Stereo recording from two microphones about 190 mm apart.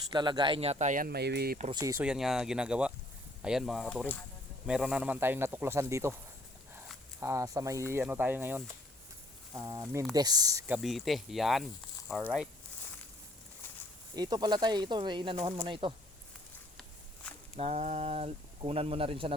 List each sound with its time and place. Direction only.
0.1 s speech: 25° right (ahead or behind); by 1.5 s 60° right (ahead or behind)
1.7 s speech: 15° right (ahead or behind)
2.0 s speech: centre (ahead or behind)
7.2 s speech: 15° right (ahead or behind)
10.8 s speech: centre (ahead or behind)
14.2 s speech: 20° right (ahead or behind)
17.6 s speech: 35° right (ahead or behind)